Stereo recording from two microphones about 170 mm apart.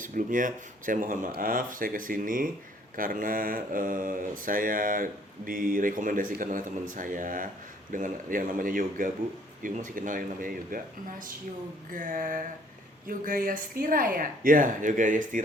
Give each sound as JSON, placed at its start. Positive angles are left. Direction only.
{"t": 0.0, "sound": "speech", "side_deg": -50}
{"t": 11.9, "sound": "speech", "side_deg": -50}